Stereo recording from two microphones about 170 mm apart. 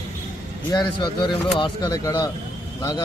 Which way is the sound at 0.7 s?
25° left (ahead or behind).